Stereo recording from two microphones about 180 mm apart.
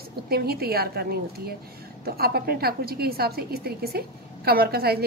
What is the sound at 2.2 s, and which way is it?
A woman's voice, 60° right (ahead or behind).